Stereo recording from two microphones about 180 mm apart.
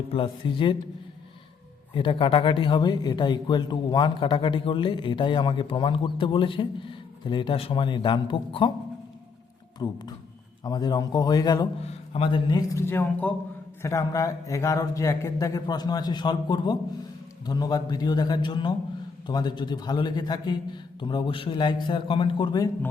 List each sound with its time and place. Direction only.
0.1 s speech: 30° left (ahead or behind)
1.9 s speech: 25° left (ahead or behind)
9.7 s speech: 25° left (ahead or behind)
11.8 s speech: 35° left (ahead or behind)